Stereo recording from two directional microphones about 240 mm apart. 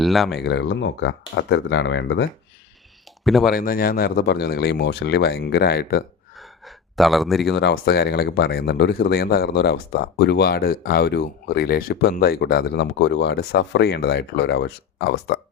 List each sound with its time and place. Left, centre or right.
0.0 s speech: centre
0.3 s speech: left
3.2 s speech: centre
3.5 s speech: left
6.3 s gasp: centre
7.5 s speech: left